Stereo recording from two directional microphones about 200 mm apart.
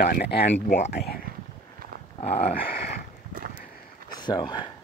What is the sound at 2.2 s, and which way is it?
Dog, 30° left (ahead or behind).